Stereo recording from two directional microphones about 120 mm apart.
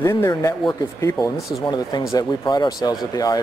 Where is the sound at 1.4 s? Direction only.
Centre (ahead or behind).